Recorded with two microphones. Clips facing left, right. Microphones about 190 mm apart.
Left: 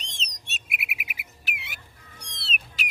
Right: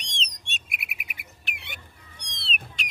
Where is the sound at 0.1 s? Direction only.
5° left (ahead or behind).